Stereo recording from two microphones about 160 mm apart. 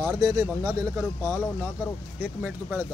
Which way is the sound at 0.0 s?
20° right (ahead or behind).